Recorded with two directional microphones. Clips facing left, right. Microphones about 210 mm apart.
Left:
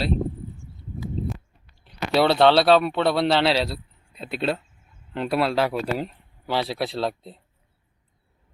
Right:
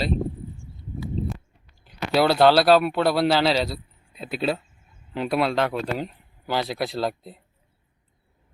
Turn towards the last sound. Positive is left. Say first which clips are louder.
# even
turn(degrees=0)  # may be behind; listen again after turning